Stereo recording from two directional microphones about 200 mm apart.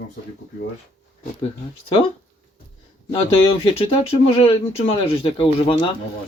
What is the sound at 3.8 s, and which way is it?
Speech, 30° left (ahead or behind).